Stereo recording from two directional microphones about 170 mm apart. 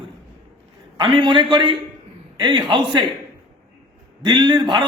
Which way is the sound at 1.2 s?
30° right (ahead or behind).